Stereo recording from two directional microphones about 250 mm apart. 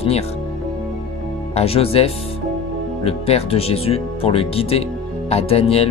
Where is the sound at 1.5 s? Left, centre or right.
Left.